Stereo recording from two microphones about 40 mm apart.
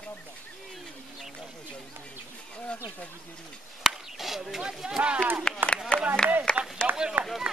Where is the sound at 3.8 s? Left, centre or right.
Centre.